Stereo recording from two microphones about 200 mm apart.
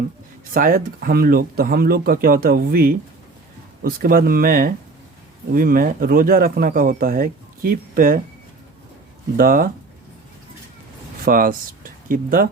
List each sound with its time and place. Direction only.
0.5 s speech: 45° right (ahead or behind)
9.4 s speech: 45° right (ahead or behind)
11.3 s speech: 45° right (ahead or behind)